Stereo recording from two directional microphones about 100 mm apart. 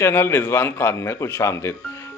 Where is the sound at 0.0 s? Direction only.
25° left (ahead or behind).